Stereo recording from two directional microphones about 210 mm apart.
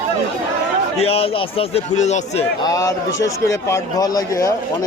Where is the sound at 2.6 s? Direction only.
15° left (ahead or behind).